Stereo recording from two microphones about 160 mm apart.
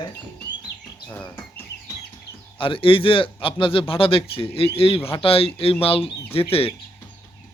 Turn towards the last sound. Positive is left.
turn(degrees=35)  # may be behind; listen again after turning